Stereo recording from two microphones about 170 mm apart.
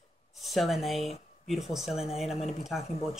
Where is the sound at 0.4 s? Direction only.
Centre (ahead or behind).